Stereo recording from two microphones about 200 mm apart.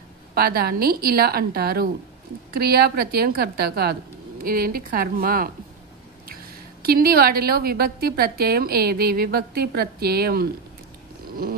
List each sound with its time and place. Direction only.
0.3 s a woman's voice: 50° right (ahead or behind)